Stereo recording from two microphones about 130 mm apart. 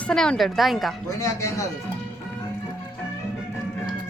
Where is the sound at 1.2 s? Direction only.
25° left (ahead or behind).